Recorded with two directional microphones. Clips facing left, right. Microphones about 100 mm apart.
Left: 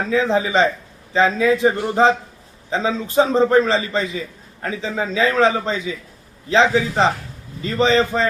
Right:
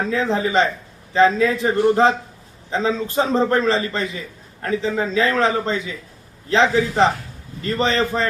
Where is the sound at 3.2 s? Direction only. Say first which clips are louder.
Left 4 dB; 5° left (ahead or behind).